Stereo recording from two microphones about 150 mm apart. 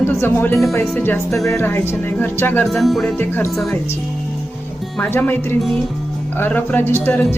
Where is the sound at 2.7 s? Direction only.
Centre (ahead or behind).